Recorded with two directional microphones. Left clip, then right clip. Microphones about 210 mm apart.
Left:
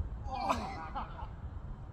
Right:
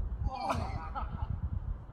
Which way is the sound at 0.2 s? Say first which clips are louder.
Left 1 dB; 15° right (ahead or behind).